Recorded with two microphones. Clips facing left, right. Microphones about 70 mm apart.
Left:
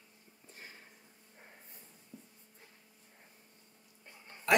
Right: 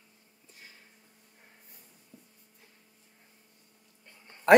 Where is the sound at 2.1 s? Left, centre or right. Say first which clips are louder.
Left 3 dB; centre.